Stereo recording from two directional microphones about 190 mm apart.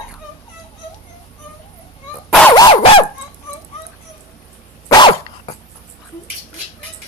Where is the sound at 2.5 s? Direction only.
25° left (ahead or behind).